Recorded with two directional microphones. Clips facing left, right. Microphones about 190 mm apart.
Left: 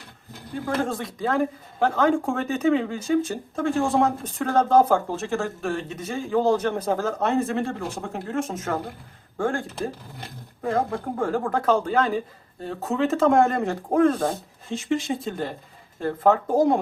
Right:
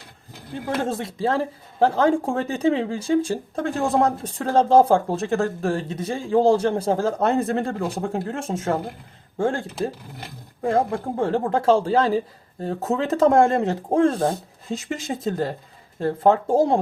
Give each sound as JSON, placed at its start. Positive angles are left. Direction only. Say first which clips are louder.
{"t": 0.9, "sound": "a man's voice", "louder": "right 3 dB", "side_deg": -25}
{"t": 14.7, "sound": "a man's voice", "louder": "left 3 dB", "side_deg": -40}